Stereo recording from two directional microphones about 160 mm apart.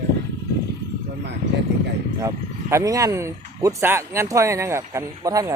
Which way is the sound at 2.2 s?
20° right (ahead or behind).